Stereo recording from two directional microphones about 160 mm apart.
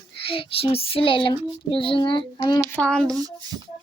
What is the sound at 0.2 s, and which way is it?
Child singing, 35° left (ahead or behind).